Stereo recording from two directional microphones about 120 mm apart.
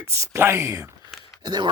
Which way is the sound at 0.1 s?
20° right (ahead or behind).